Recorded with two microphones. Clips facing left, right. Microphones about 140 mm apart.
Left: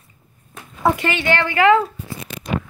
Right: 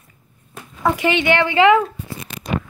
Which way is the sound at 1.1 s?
20° right (ahead or behind).